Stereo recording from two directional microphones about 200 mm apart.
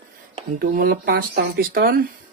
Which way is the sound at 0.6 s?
45° right (ahead or behind).